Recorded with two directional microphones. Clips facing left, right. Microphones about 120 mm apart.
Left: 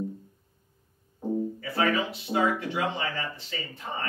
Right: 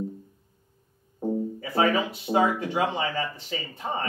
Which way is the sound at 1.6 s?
20° right (ahead or behind).